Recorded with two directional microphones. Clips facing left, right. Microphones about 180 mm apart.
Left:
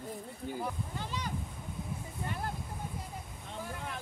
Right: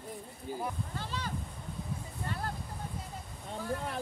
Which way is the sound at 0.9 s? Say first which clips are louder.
Even; 15° left (ahead or behind).